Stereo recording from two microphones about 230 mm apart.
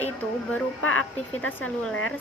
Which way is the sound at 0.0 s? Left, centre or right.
Centre.